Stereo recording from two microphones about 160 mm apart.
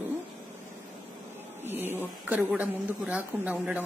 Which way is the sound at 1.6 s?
15° right (ahead or behind).